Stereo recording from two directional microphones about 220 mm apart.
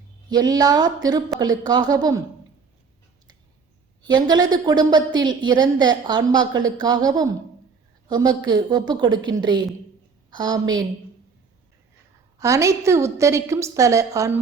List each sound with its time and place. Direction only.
0.3 s a woman's voice: 20° right (ahead or behind)
4.0 s a woman's voice: 20° right (ahead or behind)
12.4 s a woman's voice: 15° right (ahead or behind)